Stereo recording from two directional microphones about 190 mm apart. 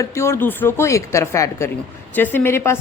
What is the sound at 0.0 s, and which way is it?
A woman's voice, 15° left (ahead or behind).